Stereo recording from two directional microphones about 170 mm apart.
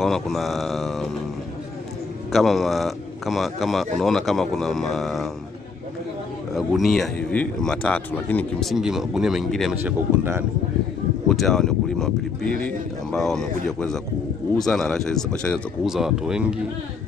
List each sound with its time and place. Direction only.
0.0 s speech: centre (ahead or behind)
2.3 s speech: centre (ahead or behind)
6.5 s speech: centre (ahead or behind)
9.8 s speech: 15° right (ahead or behind)
11.2 s speech: centre (ahead or behind)